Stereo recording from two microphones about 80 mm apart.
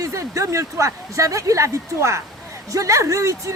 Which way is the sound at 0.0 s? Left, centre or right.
Right.